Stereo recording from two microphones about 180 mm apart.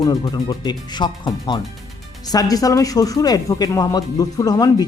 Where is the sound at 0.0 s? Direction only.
20° left (ahead or behind).